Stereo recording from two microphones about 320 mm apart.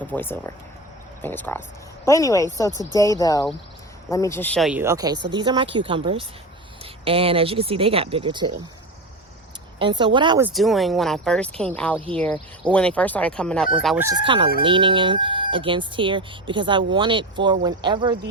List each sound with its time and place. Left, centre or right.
0.1 s speech: centre
9.7 s speech: centre
14.6 s speech: centre